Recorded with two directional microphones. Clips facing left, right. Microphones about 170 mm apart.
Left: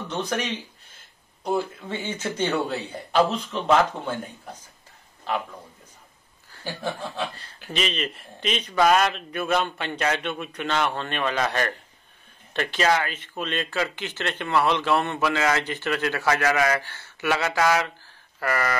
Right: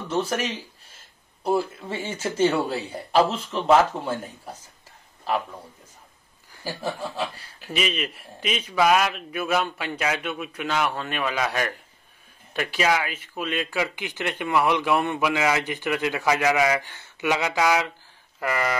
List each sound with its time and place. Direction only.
0.1 s speech: 5° right (ahead or behind)
4.0 s speech: 10° right (ahead or behind)
6.5 s speech: 10° right (ahead or behind)